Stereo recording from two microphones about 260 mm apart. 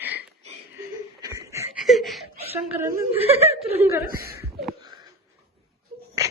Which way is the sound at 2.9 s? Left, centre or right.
Right.